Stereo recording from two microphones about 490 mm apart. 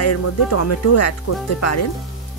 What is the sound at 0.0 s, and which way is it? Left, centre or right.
A woman's voice, left.